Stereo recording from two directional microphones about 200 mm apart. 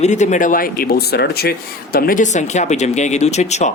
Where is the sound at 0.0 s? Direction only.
35° left (ahead or behind).